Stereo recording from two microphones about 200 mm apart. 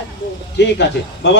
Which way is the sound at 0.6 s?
60° left (ahead or behind).